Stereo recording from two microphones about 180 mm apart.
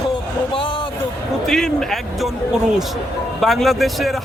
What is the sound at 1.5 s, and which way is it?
A man's voice, 5° left (ahead or behind).